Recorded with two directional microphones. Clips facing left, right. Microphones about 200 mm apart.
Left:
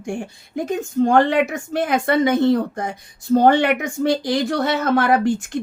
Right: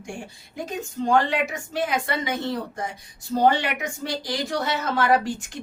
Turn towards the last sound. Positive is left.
turn(degrees=55)  # may be behind; listen again after turning